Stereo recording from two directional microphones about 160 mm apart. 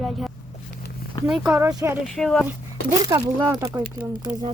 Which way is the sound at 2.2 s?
5° left (ahead or behind).